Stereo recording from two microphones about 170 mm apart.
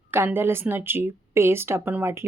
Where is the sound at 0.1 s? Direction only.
15° right (ahead or behind).